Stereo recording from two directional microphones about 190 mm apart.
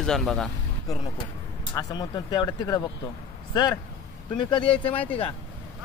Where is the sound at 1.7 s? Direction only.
20° left (ahead or behind).